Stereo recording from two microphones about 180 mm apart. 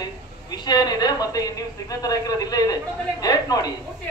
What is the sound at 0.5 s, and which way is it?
A woman's voice, 20° left (ahead or behind).